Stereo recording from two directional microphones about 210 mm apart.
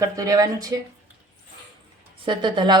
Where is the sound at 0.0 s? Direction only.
15° right (ahead or behind).